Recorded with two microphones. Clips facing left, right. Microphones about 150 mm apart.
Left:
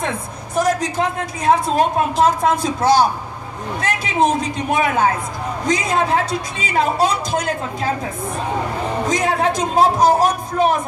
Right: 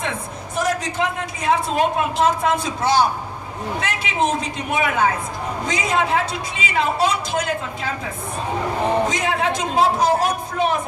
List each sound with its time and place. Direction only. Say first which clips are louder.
0.7 s a woman's voice: left 2 dB; 40° left (ahead or behind)
9.1 s a woman's voice: left 3 dB; 40° left (ahead or behind)